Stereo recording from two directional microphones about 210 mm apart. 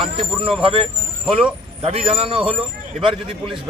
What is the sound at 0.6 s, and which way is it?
A man's voice, 25° right (ahead or behind).